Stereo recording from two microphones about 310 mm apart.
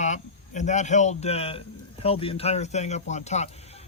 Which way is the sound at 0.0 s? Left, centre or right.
Left.